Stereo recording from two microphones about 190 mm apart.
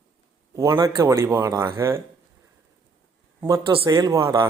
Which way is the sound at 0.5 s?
20° right (ahead or behind).